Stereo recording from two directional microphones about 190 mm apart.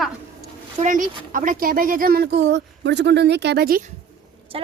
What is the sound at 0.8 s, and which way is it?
A woman's voice, 45° right (ahead or behind).